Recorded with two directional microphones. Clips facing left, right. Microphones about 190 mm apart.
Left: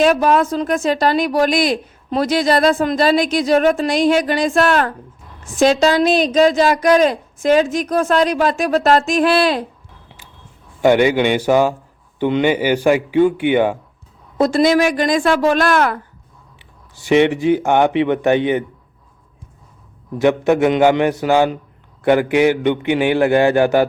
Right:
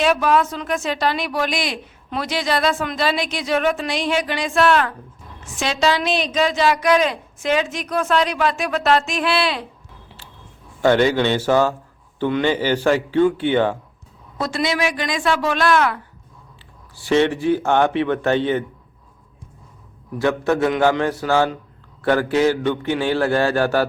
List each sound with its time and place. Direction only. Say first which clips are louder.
0.0 s a woman's voice: left 4 dB; 45° left (ahead or behind)
10.1 s a sound: left 1 dB; 15° left (ahead or behind)
10.8 s a man's voice: left 3 dB; 15° left (ahead or behind)
14.3 s a woman's voice: left 9 dB; 45° left (ahead or behind)
16.9 s a man's voice: left 4 dB; 20° left (ahead or behind)
20.1 s a man's voice: left 5 dB; 20° left (ahead or behind)